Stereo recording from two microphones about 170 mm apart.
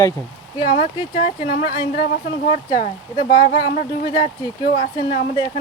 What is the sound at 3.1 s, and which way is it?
Speech, 25° left (ahead or behind).